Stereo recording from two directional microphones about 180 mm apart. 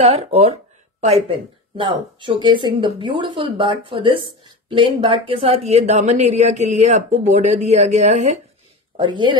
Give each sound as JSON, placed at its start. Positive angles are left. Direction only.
{"t": 0.0, "sound": "speech", "side_deg": -35}
{"t": 1.8, "sound": "speech", "side_deg": -25}
{"t": 8.9, "sound": "speech", "side_deg": -25}